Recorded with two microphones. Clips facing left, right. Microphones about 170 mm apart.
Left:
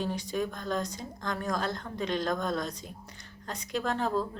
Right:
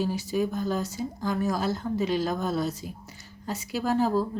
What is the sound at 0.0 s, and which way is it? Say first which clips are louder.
Speech: right 5 dB; 5° right (ahead or behind).